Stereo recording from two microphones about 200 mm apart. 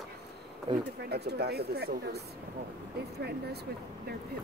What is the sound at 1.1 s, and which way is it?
Speech, 55° right (ahead or behind).